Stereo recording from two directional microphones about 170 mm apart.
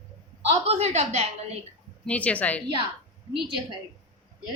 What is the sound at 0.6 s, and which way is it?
Speech, 40° right (ahead or behind).